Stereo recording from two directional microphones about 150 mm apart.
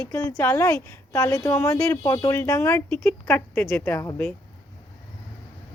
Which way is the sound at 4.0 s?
20° left (ahead or behind).